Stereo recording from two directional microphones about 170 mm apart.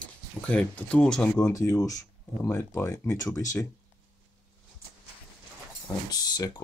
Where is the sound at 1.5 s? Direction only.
20° left (ahead or behind).